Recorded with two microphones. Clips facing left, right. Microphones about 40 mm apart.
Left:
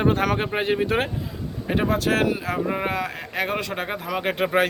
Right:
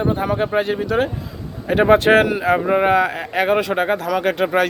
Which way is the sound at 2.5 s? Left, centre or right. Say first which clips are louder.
Right 8 dB; right.